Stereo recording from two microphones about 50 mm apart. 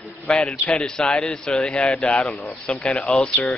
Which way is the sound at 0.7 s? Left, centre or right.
Centre.